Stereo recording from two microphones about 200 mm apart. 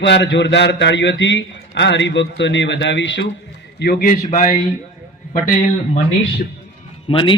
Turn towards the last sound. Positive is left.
turn(degrees=25)  # may be behind; listen again after turning